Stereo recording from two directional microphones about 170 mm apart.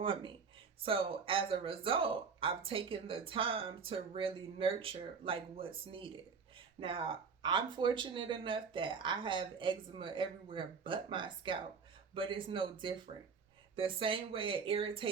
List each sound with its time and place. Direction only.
0.0 s speech: 30° right (ahead or behind)
13.7 s speech: 30° right (ahead or behind)